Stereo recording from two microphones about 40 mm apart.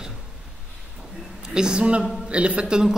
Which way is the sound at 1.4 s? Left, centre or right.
Centre.